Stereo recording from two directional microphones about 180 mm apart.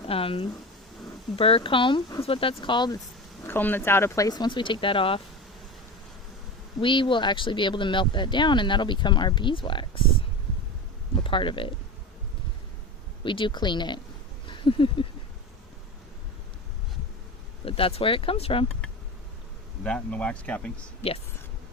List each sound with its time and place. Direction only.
0.1 s speech: 30° left (ahead or behind)
3.4 s speech: 10° left (ahead or behind); by 5.2 s 30° left (ahead or behind)
6.8 s speech: 25° left (ahead or behind)
11.1 s speech: 30° left (ahead or behind)
13.2 s speech: 25° left (ahead or behind)
14.4 s a sound: 25° left (ahead or behind)
17.7 s speech: 30° left (ahead or behind)
19.8 s speech: 5° left (ahead or behind)